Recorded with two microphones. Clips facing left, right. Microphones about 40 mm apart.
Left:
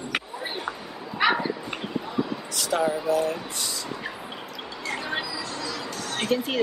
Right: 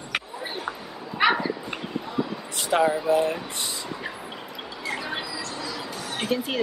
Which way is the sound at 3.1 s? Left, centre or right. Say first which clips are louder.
Right 2 dB; right.